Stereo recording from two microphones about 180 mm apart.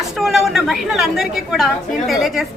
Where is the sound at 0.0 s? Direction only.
Centre (ahead or behind).